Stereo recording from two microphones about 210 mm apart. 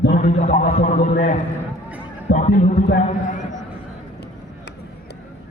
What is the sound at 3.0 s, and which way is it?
Speech, 35° left (ahead or behind).